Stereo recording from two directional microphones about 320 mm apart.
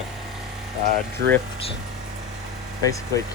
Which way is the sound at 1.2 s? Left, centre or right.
Right.